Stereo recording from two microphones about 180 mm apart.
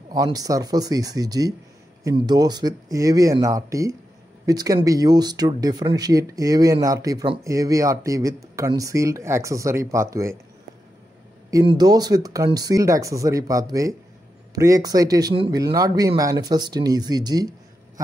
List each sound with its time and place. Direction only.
0.1 s speech: 20° right (ahead or behind)
11.6 s speech: 20° right (ahead or behind)